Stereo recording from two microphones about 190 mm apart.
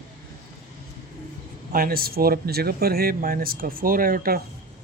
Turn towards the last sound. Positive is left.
turn(degrees=-50)  # may be behind; listen again after turning